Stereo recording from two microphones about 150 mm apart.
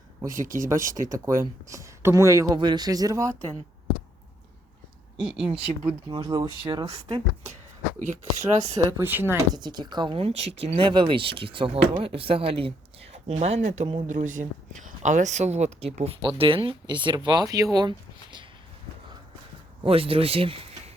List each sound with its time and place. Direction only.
0.3 s speech: 60° right (ahead or behind)
0.7 s speech: 20° right (ahead or behind)
0.9 s speech: 60° right (ahead or behind)
1.2 s speech: 20° right (ahead or behind)
5.2 s speech: 5° right (ahead or behind)
5.5 s speech: 35° right (ahead or behind)
7.9 s speech: 60° right (ahead or behind)
8.8 s speech: 20° right (ahead or behind)
9.6 s speech: 30° right (ahead or behind)
19.8 s speech: 40° right (ahead or behind)